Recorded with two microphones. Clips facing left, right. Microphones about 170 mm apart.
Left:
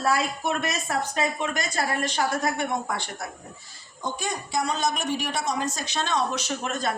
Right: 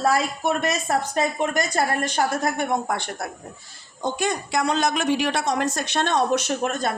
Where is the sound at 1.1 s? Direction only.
45° right (ahead or behind).